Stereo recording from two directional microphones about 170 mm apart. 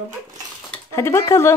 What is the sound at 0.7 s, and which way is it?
Speech, 15° left (ahead or behind).